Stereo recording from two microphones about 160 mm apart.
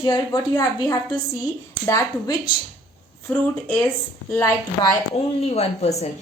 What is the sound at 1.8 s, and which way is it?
Speech, 20° left (ahead or behind).